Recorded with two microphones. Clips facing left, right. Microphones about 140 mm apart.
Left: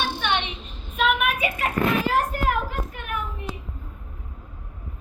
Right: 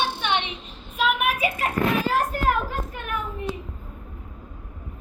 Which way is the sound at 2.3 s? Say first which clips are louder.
Right 1 dB; 30° right (ahead or behind).